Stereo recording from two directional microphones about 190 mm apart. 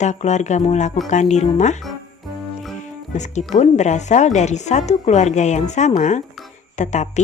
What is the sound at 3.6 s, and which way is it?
Speech, 35° left (ahead or behind).